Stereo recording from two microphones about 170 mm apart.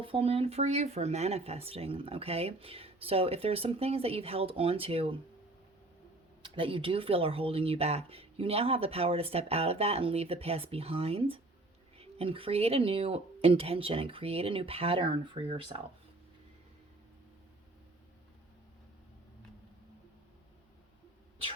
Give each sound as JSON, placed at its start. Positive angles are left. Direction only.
{"t": 0.0, "sound": "speech", "side_deg": -30}
{"t": 6.4, "sound": "speech", "side_deg": -30}